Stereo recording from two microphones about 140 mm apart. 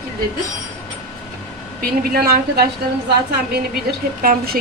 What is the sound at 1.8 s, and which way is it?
Speech, 90° right.